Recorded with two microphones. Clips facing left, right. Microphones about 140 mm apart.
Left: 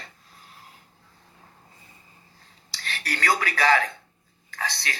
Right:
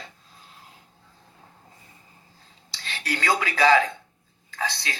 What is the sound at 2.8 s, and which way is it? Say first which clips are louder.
Speech: right 1 dB; 25° right (ahead or behind).